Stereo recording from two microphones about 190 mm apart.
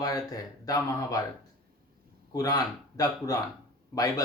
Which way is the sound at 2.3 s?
20° left (ahead or behind).